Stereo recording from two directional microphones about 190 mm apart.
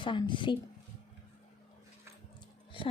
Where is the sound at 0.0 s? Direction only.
25° left (ahead or behind).